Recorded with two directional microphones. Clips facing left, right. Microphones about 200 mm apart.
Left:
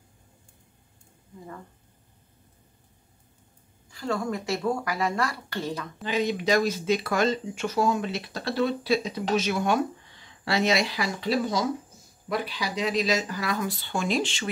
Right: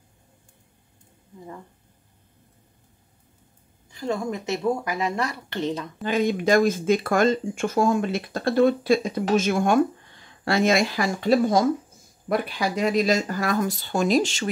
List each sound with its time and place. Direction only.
3.9 s speech: 20° right (ahead or behind)
6.0 s speech: 50° right (ahead or behind)